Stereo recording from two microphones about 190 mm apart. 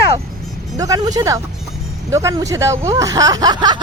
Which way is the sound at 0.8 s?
20° right (ahead or behind).